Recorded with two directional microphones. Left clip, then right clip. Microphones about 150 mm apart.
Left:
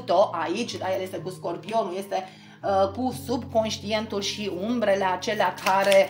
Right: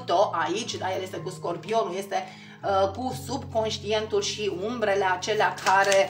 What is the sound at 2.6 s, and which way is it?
Music, 15° left (ahead or behind).